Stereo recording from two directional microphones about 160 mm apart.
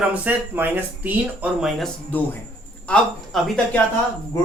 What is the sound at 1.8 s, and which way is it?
A man's voice, 10° left (ahead or behind).